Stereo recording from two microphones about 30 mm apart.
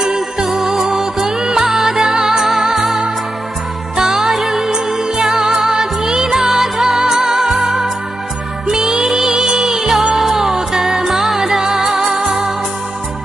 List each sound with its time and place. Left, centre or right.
0.4 s music: centre
1.6 s music: centre
4.1 s music: centre
8.6 s music: right
9.0 s music: centre